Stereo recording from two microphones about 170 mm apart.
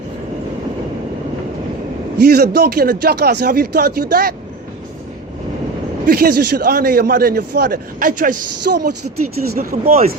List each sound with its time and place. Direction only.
2.2 s a man's voice: 70° right (ahead or behind)
6.1 s a man's voice: 65° right (ahead or behind)
8.7 s speech: 75° right (ahead or behind)